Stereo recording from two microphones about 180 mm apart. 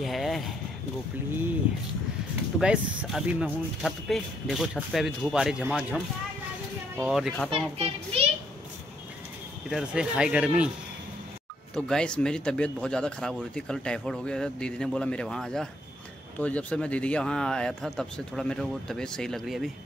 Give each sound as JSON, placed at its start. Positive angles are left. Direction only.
{"t": 0.0, "sound": "a sound", "side_deg": 0}
{"t": 2.6, "sound": "speech", "side_deg": -5}
{"t": 7.0, "sound": "speech", "side_deg": 0}
{"t": 7.5, "sound": "a child's voice", "side_deg": -35}
{"t": 9.7, "sound": "speech", "side_deg": -5}
{"t": 11.7, "sound": "speech", "side_deg": 5}